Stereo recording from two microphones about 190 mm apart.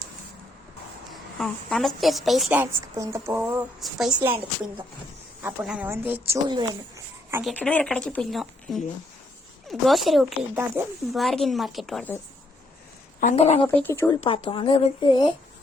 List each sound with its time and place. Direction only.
1.1 s a woman's voice: centre (ahead or behind)
5.4 s a woman's voice: 10° right (ahead or behind)
7.4 s a woman's voice: 5° left (ahead or behind)
10.5 s speech: 10° right (ahead or behind)
11.1 s a woman's voice: centre (ahead or behind)
13.3 s speech: 35° left (ahead or behind)
13.7 s speech: 10° left (ahead or behind)
14.2 s speech: 30° left (ahead or behind)